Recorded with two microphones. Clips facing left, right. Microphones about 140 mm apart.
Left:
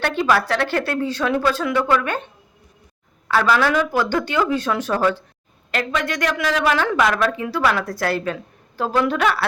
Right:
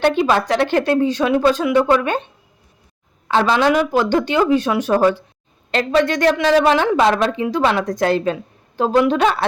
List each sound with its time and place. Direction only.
0.0 s a woman's voice: 20° right (ahead or behind)
3.2 s speech: 25° right (ahead or behind)
5.7 s a woman's voice: 30° right (ahead or behind)